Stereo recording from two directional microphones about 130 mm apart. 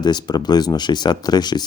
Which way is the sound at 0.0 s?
35° left (ahead or behind).